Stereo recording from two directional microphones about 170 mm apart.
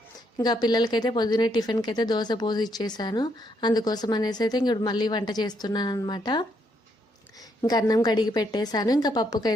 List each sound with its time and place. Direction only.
0.3 s speech: 25° left (ahead or behind)